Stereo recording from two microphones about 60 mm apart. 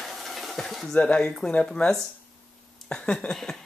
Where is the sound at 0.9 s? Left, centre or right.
Centre.